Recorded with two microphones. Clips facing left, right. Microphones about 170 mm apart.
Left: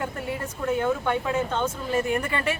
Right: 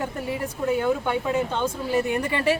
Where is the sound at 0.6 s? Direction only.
15° right (ahead or behind).